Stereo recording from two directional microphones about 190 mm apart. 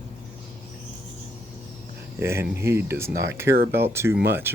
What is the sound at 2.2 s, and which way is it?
Speech, 15° right (ahead or behind).